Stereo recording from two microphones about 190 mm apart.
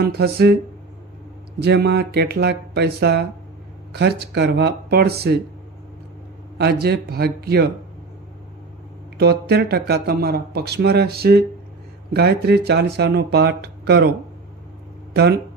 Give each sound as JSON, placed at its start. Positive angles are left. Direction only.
{"t": 0.0, "sound": "speech", "side_deg": -55}
{"t": 1.5, "sound": "speech", "side_deg": -60}
{"t": 6.6, "sound": "speech", "side_deg": -55}
{"t": 9.1, "sound": "speech", "side_deg": -60}
{"t": 15.1, "sound": "speech", "side_deg": -60}